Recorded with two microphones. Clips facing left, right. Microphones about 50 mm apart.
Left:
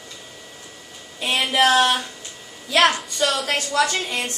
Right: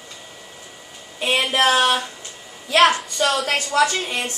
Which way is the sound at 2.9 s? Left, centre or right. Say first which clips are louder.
Right 2 dB; centre.